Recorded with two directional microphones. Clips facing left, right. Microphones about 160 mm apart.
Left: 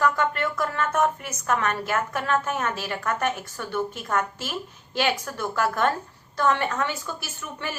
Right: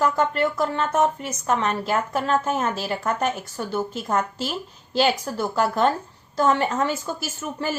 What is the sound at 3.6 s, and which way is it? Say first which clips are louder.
Speech: right 2 dB; 35° right (ahead or behind).